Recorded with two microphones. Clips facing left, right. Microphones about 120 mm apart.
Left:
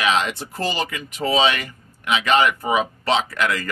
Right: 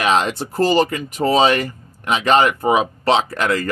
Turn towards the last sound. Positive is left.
turn(degrees=-35)  # may be behind; listen again after turning